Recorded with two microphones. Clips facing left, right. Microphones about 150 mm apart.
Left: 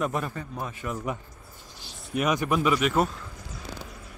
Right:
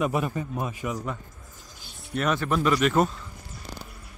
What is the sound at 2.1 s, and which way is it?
Speech, 10° left (ahead or behind).